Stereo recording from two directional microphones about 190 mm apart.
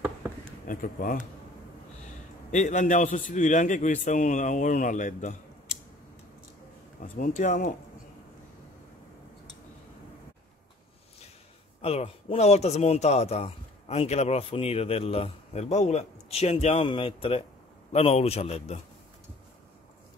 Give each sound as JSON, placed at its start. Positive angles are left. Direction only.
{"t": 0.7, "sound": "speech", "side_deg": 45}
{"t": 2.5, "sound": "speech", "side_deg": 40}
{"t": 7.0, "sound": "speech", "side_deg": 45}
{"t": 11.8, "sound": "speech", "side_deg": 30}